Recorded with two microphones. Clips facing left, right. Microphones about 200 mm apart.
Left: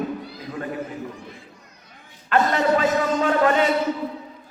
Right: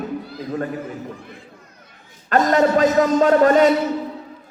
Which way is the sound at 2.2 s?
40° right (ahead or behind).